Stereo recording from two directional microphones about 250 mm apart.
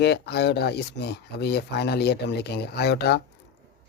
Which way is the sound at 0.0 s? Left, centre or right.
Left.